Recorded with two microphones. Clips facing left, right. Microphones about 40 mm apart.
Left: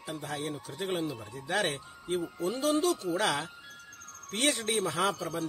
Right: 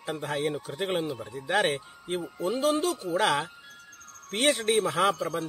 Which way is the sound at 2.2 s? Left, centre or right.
Centre.